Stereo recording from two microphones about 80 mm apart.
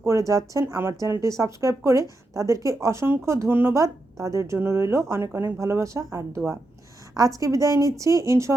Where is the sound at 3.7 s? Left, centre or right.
Right.